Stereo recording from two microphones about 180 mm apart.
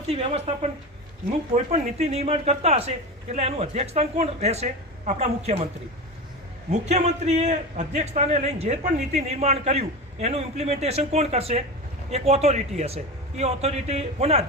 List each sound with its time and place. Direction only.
0.1 s a man's voice: 35° right (ahead or behind)
6.7 s a man's voice: 40° right (ahead or behind)